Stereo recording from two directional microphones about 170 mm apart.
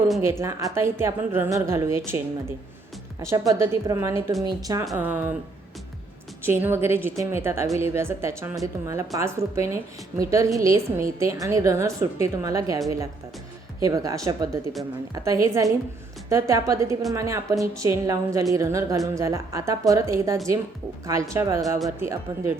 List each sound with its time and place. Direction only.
0.2 s a woman's voice: 15° right (ahead or behind)
4.9 s a woman's voice: 10° right (ahead or behind)
6.4 s a woman's voice: 15° right (ahead or behind)